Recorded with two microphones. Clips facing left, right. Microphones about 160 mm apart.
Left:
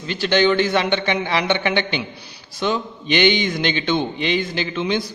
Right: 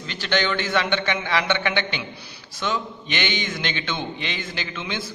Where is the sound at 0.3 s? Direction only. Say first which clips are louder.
Left 6 dB; 20° left (ahead or behind).